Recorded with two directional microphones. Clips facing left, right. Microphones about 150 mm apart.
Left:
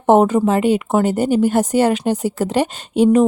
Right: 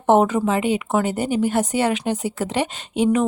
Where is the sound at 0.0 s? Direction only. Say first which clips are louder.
Left 4 dB; 40° left (ahead or behind).